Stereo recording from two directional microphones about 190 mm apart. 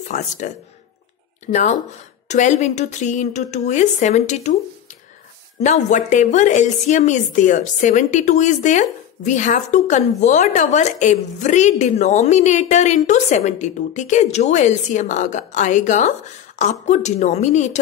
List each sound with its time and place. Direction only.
0.4 s speech: 40° left (ahead or behind)
5.6 s speech: 40° left (ahead or behind)